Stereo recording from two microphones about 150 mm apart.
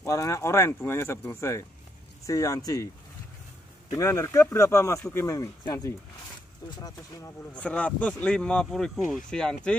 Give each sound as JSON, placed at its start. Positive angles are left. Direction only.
{"t": 0.0, "sound": "speech", "side_deg": 20}
{"t": 3.9, "sound": "speech", "side_deg": 20}
{"t": 7.5, "sound": "speech", "side_deg": 10}